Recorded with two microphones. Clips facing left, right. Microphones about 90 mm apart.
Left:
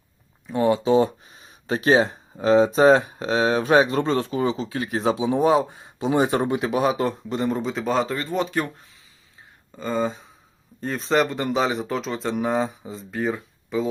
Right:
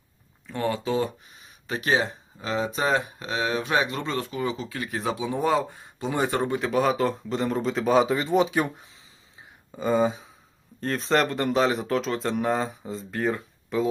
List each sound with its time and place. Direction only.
0.4 s speech: 20° left (ahead or behind); by 13.8 s centre (ahead or behind)